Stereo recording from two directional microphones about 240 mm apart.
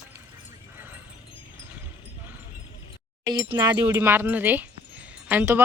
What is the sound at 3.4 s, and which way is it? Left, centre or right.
Speech, centre.